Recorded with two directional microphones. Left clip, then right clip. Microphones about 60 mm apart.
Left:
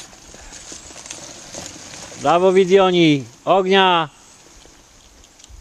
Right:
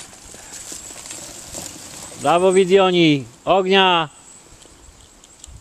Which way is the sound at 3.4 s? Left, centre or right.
Left.